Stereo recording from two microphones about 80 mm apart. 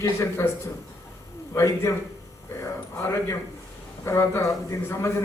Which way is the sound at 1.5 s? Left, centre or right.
Left.